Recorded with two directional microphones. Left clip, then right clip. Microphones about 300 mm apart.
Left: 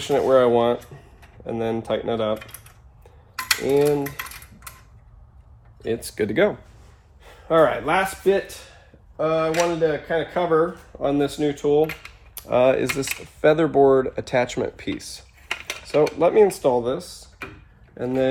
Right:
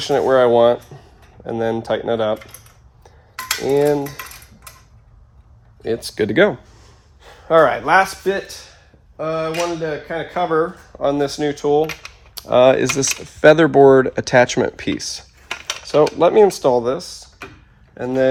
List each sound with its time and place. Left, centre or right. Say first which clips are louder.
0.0 s speech: right 3 dB; right
3.7 s speech: right 4 dB; right
5.8 s speech: right 4 dB; right
9.1 s speech: left 1 dB; centre; by 18.3 s right